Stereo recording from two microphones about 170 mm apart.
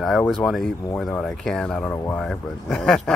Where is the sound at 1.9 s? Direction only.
15° left (ahead or behind).